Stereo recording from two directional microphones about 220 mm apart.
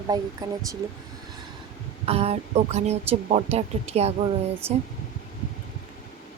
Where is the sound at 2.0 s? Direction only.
30° right (ahead or behind).